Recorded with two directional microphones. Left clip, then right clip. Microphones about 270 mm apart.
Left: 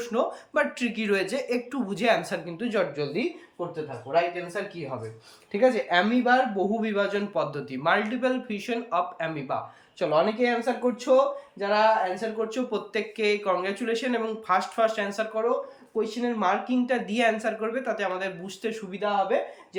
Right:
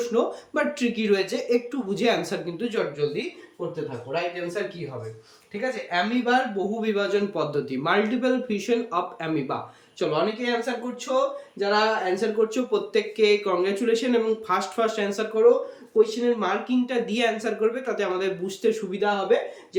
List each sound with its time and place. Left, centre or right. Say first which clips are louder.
0.1 s speech: right 2 dB; centre
5.6 s speech: left 4 dB; left
6.8 s speech: right 3 dB; centre
11.6 s speech: even; centre